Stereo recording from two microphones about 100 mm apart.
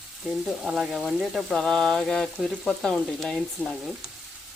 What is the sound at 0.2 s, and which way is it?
Frying, centre (ahead or behind).